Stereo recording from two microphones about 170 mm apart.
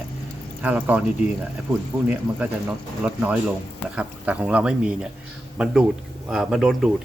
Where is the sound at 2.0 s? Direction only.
5° right (ahead or behind).